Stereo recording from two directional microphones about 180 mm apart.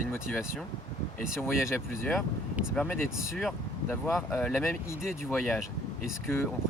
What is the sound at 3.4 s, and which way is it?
Speech, centre (ahead or behind).